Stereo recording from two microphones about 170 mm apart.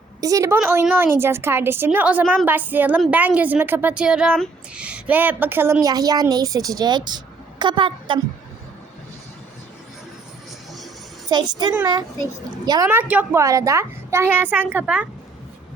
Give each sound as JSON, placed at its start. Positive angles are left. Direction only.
{"t": 0.2, "sound": "a woman's voice", "side_deg": -20}
{"t": 11.3, "sound": "a woman's voice", "side_deg": -25}
{"t": 12.9, "sound": "speech", "side_deg": -10}